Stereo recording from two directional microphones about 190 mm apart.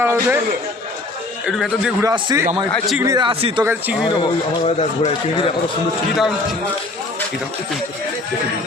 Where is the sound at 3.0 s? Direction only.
20° right (ahead or behind).